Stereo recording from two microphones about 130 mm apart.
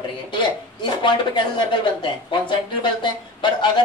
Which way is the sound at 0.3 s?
35° left (ahead or behind).